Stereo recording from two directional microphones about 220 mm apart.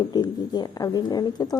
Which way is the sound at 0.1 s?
20° left (ahead or behind).